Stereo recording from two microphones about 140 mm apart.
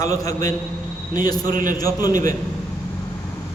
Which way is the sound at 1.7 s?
25° left (ahead or behind).